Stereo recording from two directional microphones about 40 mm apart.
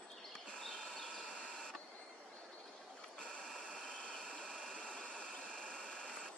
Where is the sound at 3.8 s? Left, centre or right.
Left.